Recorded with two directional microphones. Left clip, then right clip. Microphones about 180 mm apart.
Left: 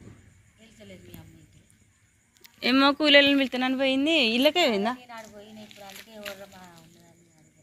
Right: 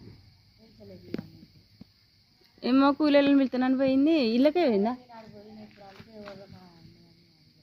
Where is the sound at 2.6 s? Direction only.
25° right (ahead or behind).